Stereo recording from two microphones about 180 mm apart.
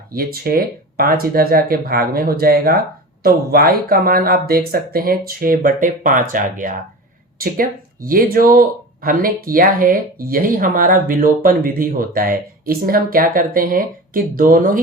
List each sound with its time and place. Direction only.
0.1 s speech: 55° right (ahead or behind)